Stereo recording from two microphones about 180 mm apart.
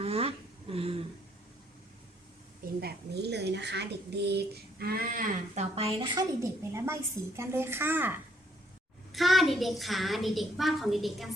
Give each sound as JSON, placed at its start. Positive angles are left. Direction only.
{"t": 0.0, "sound": "a sound", "side_deg": -35}
{"t": 2.8, "sound": "speech", "side_deg": -70}
{"t": 5.7, "sound": "a woman's voice", "side_deg": -30}
{"t": 9.1, "sound": "a child's voice", "side_deg": 0}